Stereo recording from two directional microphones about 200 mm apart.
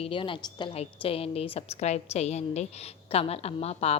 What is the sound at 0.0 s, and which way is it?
A woman's voice, 25° left (ahead or behind).